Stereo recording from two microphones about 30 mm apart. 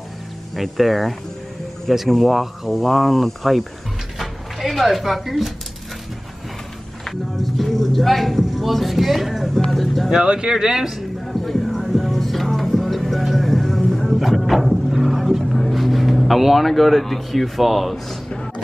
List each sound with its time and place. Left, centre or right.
0.6 s speech: centre
4.2 s a sound: centre
7.1 s speech: centre
10.2 s speech: right
11.2 s music: centre
15.7 s speech: centre